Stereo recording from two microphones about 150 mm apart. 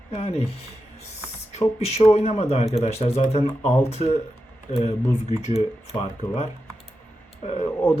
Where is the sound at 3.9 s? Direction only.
45° left (ahead or behind).